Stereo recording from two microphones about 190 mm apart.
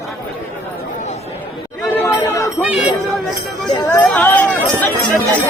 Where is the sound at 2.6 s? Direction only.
5° right (ahead or behind).